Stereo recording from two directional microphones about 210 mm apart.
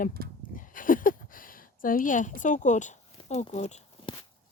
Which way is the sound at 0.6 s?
40° left (ahead or behind).